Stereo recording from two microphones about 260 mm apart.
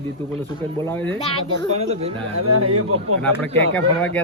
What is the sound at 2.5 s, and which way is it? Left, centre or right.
Speech, right.